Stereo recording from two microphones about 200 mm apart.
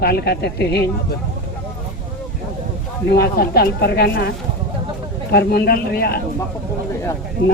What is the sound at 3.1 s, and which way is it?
A woman's voice, 55° left (ahead or behind).